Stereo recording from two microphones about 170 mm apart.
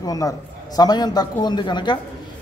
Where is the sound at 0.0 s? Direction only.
20° left (ahead or behind).